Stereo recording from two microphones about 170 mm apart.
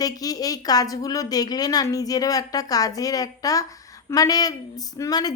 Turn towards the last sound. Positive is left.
turn(degrees=20)  # may be behind; listen again after turning